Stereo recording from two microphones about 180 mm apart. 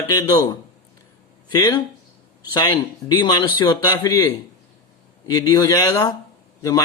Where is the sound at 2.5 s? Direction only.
25° left (ahead or behind).